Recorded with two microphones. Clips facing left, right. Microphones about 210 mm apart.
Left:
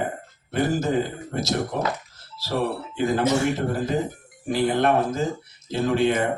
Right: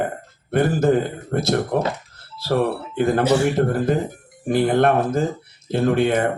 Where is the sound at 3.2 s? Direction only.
35° right (ahead or behind).